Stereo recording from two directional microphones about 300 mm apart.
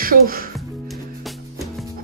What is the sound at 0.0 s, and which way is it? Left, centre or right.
Speech, right.